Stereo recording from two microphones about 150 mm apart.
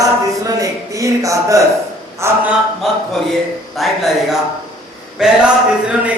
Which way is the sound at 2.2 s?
20° right (ahead or behind).